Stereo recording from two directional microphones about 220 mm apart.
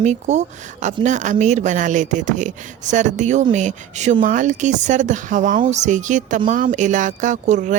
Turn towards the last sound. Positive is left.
turn(degrees=-35)  # may be behind; listen again after turning